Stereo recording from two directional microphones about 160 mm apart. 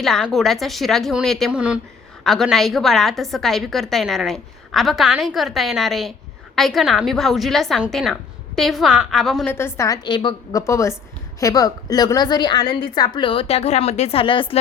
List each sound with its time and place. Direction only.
0.0 s a woman's voice: centre (ahead or behind)
9.5 s a woman's voice: 15° left (ahead or behind); by 14.6 s 35° left (ahead or behind)